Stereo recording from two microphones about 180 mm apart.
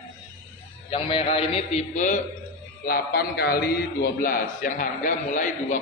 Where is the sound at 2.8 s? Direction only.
55° left (ahead or behind).